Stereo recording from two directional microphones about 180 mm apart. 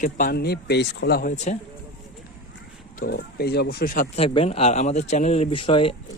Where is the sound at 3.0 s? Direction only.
60° left (ahead or behind).